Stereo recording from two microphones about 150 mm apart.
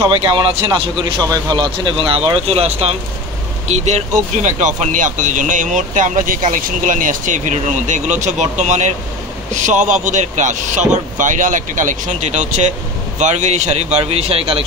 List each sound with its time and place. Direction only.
0.0 s speech: 25° right (ahead or behind); by 14.6 s 40° right (ahead or behind)